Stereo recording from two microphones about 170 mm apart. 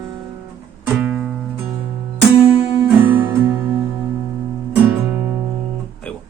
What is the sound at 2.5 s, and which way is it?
Guitar, 30° left (ahead or behind).